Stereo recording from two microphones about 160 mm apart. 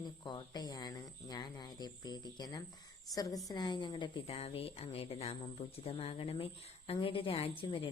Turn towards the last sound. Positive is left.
turn(degrees=35)  # may be behind; listen again after turning